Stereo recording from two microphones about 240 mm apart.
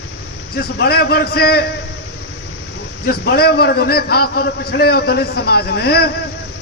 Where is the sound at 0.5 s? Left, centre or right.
Left.